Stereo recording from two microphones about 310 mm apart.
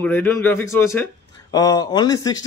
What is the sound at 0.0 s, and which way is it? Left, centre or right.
Speech, centre.